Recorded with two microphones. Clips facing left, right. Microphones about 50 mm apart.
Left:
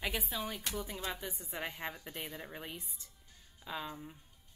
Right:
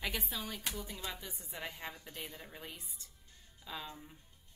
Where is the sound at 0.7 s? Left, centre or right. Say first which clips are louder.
Left 4 dB; left.